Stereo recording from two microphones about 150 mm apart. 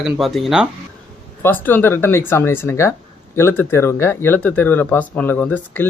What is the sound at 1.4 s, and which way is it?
Speech, 10° left (ahead or behind).